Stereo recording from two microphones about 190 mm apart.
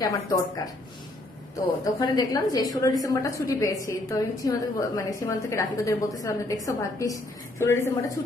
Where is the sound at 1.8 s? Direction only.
20° left (ahead or behind).